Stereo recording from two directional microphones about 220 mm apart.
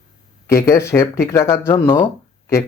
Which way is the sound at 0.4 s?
15° left (ahead or behind).